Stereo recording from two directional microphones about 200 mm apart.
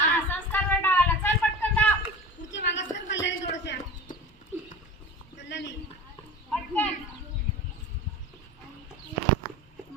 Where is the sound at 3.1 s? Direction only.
65° left (ahead or behind).